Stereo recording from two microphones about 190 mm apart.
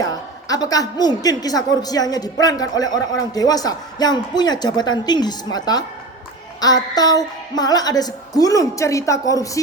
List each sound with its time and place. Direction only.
0.0 s a woman's voice: 20° left (ahead or behind)